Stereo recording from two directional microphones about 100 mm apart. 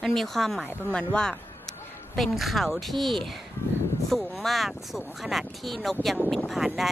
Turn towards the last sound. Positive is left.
turn(degrees=0)  # may be behind; listen again after turning